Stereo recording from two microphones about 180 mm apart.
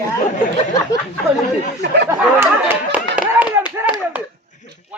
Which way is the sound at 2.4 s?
10° right (ahead or behind).